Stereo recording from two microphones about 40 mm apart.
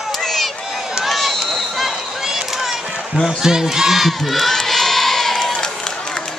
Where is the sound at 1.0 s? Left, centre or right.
Centre.